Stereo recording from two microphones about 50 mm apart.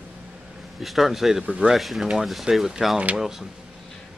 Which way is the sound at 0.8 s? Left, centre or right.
Centre.